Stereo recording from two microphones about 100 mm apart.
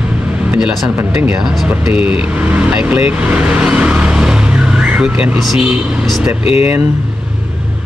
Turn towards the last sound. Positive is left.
turn(degrees=75)  # may be behind; listen again after turning